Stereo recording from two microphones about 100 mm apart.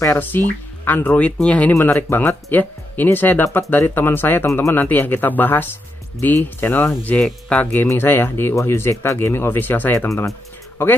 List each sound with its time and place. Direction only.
0.1 s speech: 20° left (ahead or behind)
1.7 s speech: 25° left (ahead or behind)
4.5 s speech: 30° left (ahead or behind)
4.7 s speech: 20° left (ahead or behind)
7.8 s speech: 25° left (ahead or behind)
10.0 s speech: 30° left (ahead or behind)